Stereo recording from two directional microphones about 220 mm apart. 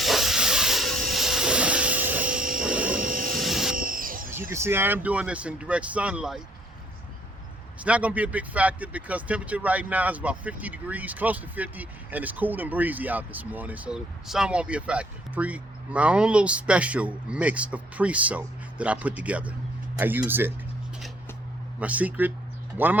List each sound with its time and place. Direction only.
0.0 s hiss: centre (ahead or behind)
2.4 s helicopter: 40° right (ahead or behind)
2.6 s a sound: 5° right (ahead or behind)
3.0 s vehicle: 40° right (ahead or behind)
3.3 s jet engine: centre (ahead or behind)
3.8 s vehicle: 40° right (ahead or behind)
4.3 s speech: 10° right (ahead or behind)
7.8 s speech: 5° right (ahead or behind)
21.8 s speech: 5° right (ahead or behind)